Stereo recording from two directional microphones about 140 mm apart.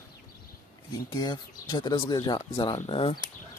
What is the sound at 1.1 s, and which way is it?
Speech, 30° left (ahead or behind).